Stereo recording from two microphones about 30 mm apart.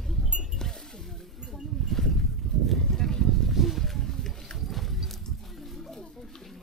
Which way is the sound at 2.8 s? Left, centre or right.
Centre.